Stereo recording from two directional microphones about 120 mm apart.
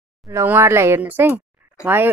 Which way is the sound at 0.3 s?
20° right (ahead or behind).